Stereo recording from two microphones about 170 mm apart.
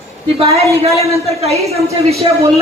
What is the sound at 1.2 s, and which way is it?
Speech, 40° right (ahead or behind).